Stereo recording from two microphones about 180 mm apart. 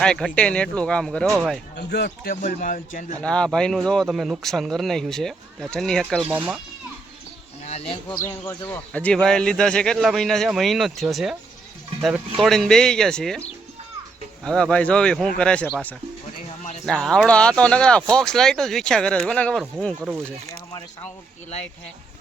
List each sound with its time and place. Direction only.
0.0 s speech: 5° left (ahead or behind)
1.7 s a man's voice: 65° left (ahead or behind); by 3.1 s 50° left (ahead or behind)
3.2 s speech: 5° left (ahead or behind)
6.2 s speech: 10° right (ahead or behind)
7.6 s a sound: 40° left (ahead or behind)
8.1 s speech: 15° left (ahead or behind)
14.4 s speech: 5° left (ahead or behind)